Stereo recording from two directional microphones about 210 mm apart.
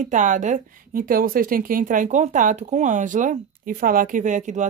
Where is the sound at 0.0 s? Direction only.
35° right (ahead or behind).